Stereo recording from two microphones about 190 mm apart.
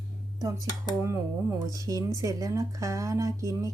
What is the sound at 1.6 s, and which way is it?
A woman's voice, 20° right (ahead or behind).